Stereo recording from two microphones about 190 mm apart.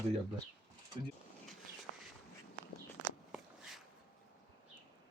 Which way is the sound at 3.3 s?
Centre (ahead or behind).